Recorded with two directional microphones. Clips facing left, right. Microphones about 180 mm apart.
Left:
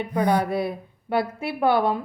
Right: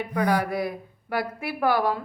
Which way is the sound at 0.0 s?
20° left (ahead or behind).